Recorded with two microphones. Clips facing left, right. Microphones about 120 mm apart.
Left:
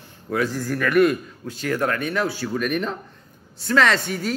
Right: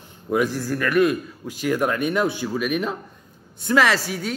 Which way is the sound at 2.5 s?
5° right (ahead or behind).